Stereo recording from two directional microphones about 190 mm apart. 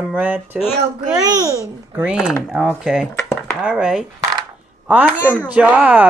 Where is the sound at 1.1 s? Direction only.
20° right (ahead or behind).